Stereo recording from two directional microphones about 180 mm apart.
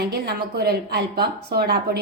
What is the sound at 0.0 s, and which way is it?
Speech, 65° right (ahead or behind).